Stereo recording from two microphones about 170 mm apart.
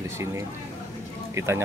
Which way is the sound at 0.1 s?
15° right (ahead or behind).